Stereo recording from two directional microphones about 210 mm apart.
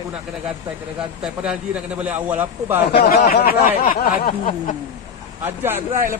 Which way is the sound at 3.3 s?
45° left (ahead or behind).